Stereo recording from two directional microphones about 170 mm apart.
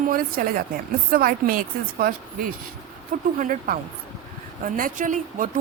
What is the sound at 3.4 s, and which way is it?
A woman's voice, 55° right (ahead or behind).